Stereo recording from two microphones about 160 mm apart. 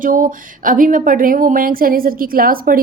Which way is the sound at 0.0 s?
55° right (ahead or behind).